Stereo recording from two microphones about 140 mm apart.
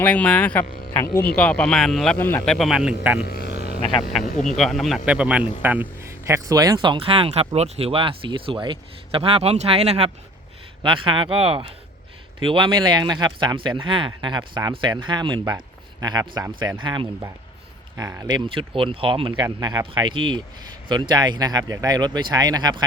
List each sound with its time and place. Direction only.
0.0 s speech: 10° left (ahead or behind)
1.4 s speech: 5° left (ahead or behind)
2.1 s speech: 15° left (ahead or behind)
2.4 s speech: centre (ahead or behind)
4.4 s speech: centre (ahead or behind)
5.0 s speech: 10° right (ahead or behind); by 10.1 s 45° right (ahead or behind)
10.8 s speech: 35° right (ahead or behind)
17.9 s speech: 25° right (ahead or behind); by 19.5 s 40° right (ahead or behind)
19.5 s speech: 25° right (ahead or behind)